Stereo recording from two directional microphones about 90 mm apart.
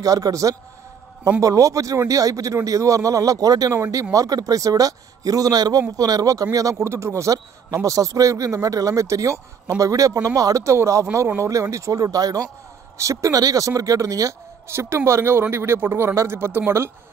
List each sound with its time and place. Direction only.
0.0 s speech: 40° right (ahead or behind)